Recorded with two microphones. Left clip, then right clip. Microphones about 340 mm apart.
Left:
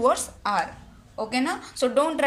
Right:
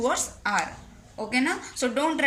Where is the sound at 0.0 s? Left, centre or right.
Centre.